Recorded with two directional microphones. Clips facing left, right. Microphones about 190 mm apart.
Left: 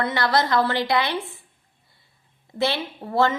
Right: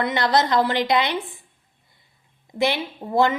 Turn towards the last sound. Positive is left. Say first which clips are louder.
# right 2 dB
turn(degrees=-15)  # may be behind; listen again after turning